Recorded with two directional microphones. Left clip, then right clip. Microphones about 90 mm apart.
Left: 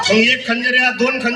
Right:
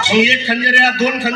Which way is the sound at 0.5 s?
40° left (ahead or behind).